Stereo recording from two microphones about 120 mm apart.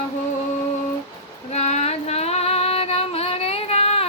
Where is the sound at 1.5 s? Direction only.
65° left (ahead or behind).